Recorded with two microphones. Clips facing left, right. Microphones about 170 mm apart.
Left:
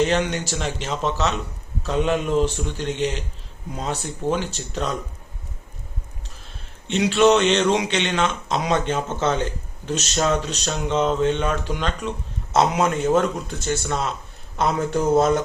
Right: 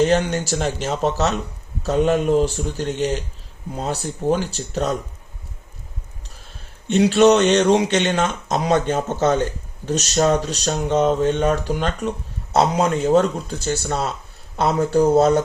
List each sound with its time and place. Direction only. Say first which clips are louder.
0.0 s speech: right 3 dB; 40° right (ahead or behind)
6.8 s speech: right 3 dB; 40° right (ahead or behind)
12.5 s speech: right 2 dB; 30° right (ahead or behind)